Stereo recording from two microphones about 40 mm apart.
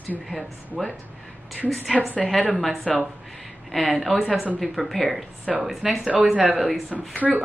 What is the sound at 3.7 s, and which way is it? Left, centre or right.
Speech, centre.